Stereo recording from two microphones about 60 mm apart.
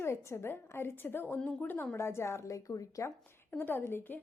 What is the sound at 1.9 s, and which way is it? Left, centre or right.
A woman's voice, left.